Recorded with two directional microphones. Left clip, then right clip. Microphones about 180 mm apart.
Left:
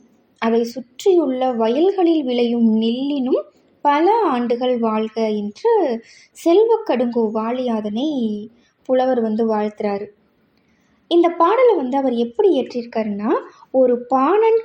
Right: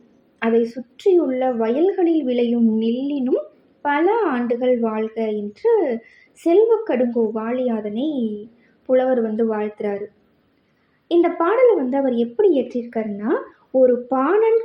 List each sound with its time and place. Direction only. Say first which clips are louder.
0.3 s a woman's voice: even; 35° left (ahead or behind)
11.1 s a woman's voice: left 3 dB; 35° left (ahead or behind)